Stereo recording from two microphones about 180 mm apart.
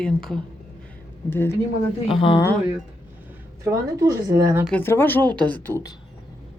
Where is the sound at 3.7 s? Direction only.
15° right (ahead or behind).